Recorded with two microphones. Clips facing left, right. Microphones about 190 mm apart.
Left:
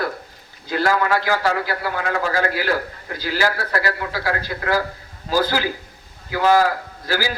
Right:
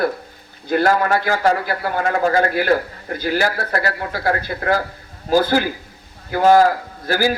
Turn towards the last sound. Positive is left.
turn(degrees=-55)  # may be behind; listen again after turning